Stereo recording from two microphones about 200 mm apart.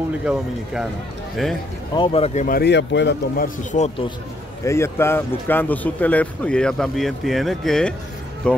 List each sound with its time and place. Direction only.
0.2 s speech: 5° right (ahead or behind)
2.0 s speech: 30° left (ahead or behind)
2.4 s speech: 50° left (ahead or behind)
3.4 s speech: 35° left (ahead or behind)
4.6 s speech: 15° left (ahead or behind)